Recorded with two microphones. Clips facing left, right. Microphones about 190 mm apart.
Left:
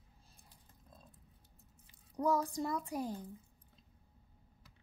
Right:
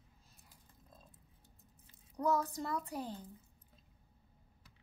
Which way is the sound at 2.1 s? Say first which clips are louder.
Left 1 dB; 10° left (ahead or behind).